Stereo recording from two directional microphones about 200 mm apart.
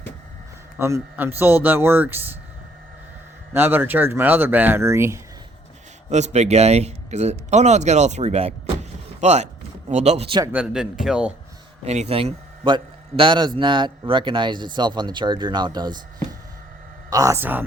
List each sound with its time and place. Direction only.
0.8 s speech: 15° right (ahead or behind)
3.5 s speech: 10° right (ahead or behind)
6.1 s speech: 35° right (ahead or behind)
10.4 s speech: 5° right (ahead or behind)
11.8 s a man's voice: 35° right (ahead or behind)
17.1 s speech: 15° right (ahead or behind)